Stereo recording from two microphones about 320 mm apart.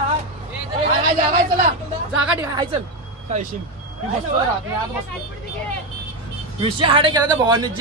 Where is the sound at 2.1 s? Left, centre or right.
Centre.